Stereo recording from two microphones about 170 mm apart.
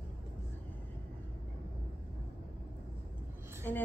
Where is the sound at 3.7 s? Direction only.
10° left (ahead or behind).